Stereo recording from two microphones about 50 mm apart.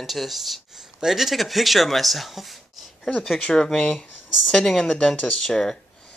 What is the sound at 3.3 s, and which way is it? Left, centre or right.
Speech, centre.